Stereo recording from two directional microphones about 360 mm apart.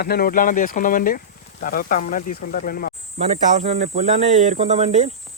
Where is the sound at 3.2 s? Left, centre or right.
Centre.